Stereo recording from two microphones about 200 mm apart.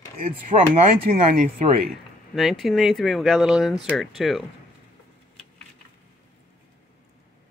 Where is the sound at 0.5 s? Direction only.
30° right (ahead or behind).